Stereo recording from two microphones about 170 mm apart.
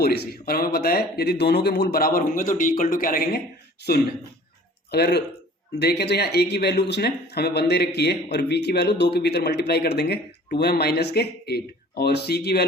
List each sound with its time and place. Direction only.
0.3 s speech: 60° left (ahead or behind)
4.9 s speech: 70° left (ahead or behind)